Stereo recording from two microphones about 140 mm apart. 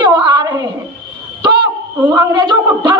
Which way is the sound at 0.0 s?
30° right (ahead or behind).